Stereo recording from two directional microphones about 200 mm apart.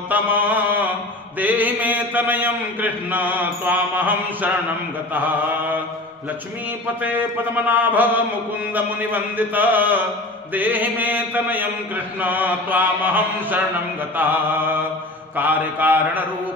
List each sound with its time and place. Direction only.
0.1 s mantra: 10° right (ahead or behind)
7.0 s mantra: 10° right (ahead or behind)